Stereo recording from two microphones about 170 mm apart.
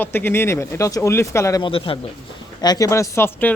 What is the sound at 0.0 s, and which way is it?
Speech, 10° left (ahead or behind).